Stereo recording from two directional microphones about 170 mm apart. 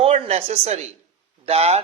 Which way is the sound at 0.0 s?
40° right (ahead or behind).